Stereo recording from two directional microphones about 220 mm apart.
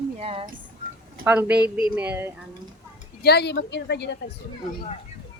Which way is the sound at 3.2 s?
50° left (ahead or behind).